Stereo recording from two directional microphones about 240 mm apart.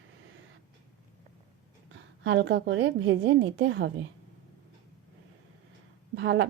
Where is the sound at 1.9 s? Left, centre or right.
Right.